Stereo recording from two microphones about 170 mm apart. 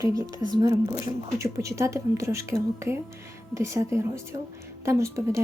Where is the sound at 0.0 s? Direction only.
20° right (ahead or behind).